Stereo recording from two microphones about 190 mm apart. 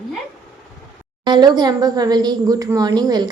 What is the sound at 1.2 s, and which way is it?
A woman's voice, 20° right (ahead or behind).